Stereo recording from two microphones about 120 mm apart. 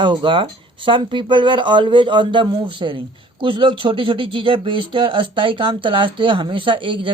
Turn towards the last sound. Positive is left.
turn(degrees=-45)  # may be behind; listen again after turning